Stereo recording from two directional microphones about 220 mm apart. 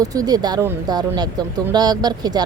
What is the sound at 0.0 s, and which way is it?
Speech, 15° right (ahead or behind).